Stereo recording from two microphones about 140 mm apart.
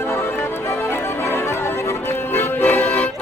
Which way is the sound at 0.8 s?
20° left (ahead or behind).